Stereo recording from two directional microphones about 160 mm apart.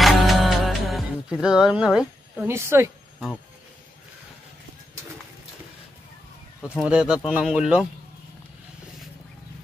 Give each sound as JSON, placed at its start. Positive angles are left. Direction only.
{"t": 0.0, "sound": "music", "side_deg": 0}
{"t": 2.3, "sound": "speech", "side_deg": -15}
{"t": 6.8, "sound": "speech", "side_deg": -5}